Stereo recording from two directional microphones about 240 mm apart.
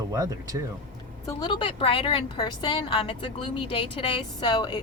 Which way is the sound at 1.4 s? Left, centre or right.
Centre.